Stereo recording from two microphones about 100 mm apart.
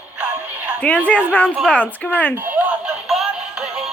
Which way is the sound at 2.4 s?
15° right (ahead or behind).